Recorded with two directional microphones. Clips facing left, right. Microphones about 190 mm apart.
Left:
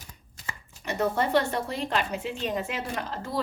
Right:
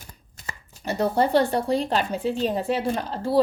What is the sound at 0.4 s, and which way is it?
Speech, 35° right (ahead or behind).